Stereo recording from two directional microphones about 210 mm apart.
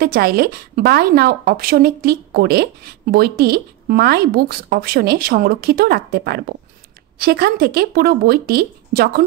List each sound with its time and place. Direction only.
0.0 s speech: 45° right (ahead or behind)